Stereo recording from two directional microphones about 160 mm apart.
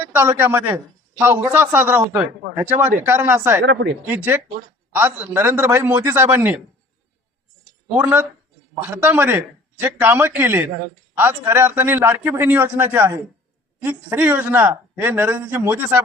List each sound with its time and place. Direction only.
0.2 s speech: 15° right (ahead or behind)
3.6 s speech: 90° right
4.0 s speech: 10° right (ahead or behind)
7.9 s speech: 10° right (ahead or behind)